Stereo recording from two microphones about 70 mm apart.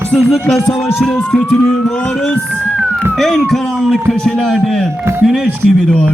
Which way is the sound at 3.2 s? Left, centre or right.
Centre.